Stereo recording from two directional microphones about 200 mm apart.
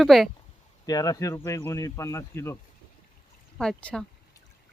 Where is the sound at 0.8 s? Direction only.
20° left (ahead or behind).